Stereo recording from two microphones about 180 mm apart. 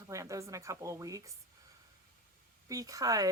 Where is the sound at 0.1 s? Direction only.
15° right (ahead or behind).